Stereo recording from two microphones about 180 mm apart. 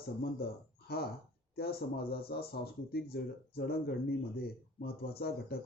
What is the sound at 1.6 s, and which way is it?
Speech, 60° left (ahead or behind).